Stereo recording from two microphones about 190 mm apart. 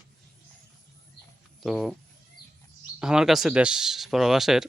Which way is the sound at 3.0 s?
5° right (ahead or behind).